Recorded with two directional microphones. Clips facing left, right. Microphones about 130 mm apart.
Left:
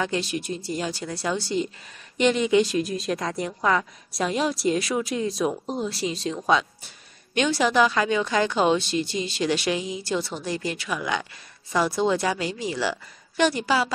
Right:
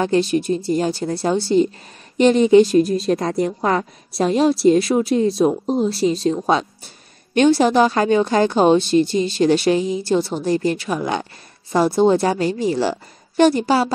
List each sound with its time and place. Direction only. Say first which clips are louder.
0.0 s a woman's voice: right 9 dB; 40° right (ahead or behind)
12.7 s speech: right 7 dB; 35° right (ahead or behind)